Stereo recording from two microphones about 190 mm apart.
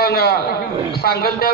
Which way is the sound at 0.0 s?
55° left (ahead or behind).